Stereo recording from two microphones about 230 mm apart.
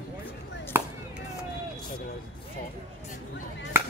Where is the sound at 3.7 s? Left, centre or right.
Centre.